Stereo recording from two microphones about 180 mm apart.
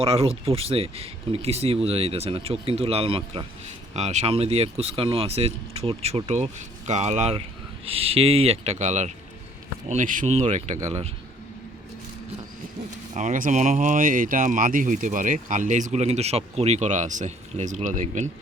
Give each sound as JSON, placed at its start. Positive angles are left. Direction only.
{"t": 0.0, "sound": "speech", "side_deg": -30}
{"t": 13.1, "sound": "speech", "side_deg": -45}